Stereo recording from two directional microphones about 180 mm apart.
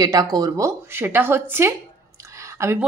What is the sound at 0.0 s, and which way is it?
A woman's voice, 20° right (ahead or behind).